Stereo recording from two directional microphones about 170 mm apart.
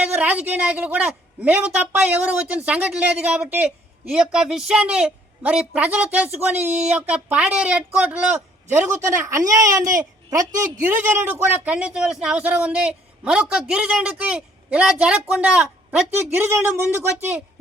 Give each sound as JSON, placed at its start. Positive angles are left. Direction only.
{"t": 0.0, "sound": "a woman's voice", "side_deg": -10}